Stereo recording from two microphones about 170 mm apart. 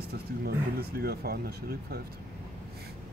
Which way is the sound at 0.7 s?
65° right (ahead or behind).